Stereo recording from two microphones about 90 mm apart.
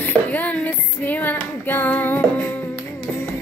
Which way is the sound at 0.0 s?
20° left (ahead or behind).